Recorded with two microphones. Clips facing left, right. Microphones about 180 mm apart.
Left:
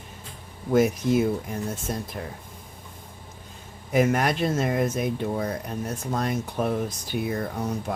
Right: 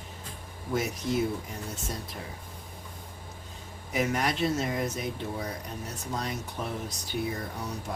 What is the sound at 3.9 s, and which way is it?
Speech, 50° left (ahead or behind).